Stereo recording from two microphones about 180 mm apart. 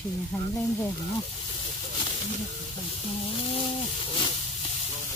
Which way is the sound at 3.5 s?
30° left (ahead or behind).